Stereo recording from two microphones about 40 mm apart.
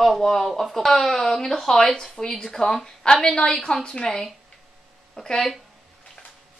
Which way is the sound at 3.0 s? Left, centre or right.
Left.